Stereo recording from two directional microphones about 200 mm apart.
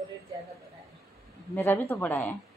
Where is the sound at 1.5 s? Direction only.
10° left (ahead or behind).